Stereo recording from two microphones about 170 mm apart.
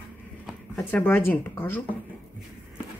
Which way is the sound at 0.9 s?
10° left (ahead or behind).